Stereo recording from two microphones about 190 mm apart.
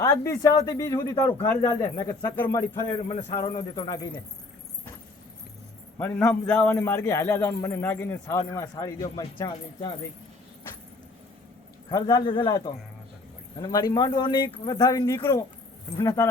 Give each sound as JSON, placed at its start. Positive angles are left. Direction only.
{"t": 0.0, "sound": "a man's voice", "side_deg": 15}
{"t": 3.1, "sound": "speech", "side_deg": 35}
{"t": 3.4, "sound": "speech", "side_deg": 20}
{"t": 6.0, "sound": "a man's voice", "side_deg": 10}
{"t": 11.9, "sound": "a man's voice", "side_deg": 20}